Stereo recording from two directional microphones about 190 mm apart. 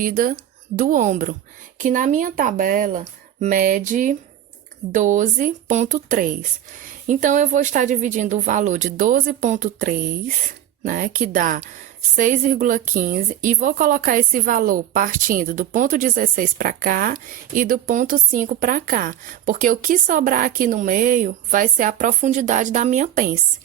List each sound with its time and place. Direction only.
0.0 s a woman's voice: 45° right (ahead or behind)